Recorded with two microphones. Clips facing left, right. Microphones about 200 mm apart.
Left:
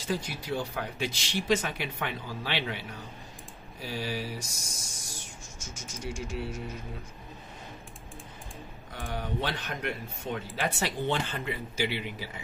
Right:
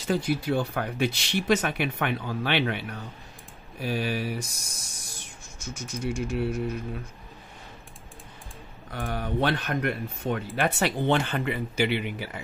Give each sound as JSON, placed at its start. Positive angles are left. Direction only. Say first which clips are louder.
{"t": 0.1, "sound": "speech", "louder": "right 7 dB", "side_deg": -60}
{"t": 8.9, "sound": "speech", "louder": "right 5 dB", "side_deg": -60}